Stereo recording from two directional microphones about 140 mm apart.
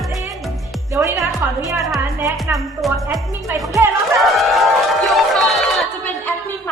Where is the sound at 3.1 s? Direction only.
25° right (ahead or behind).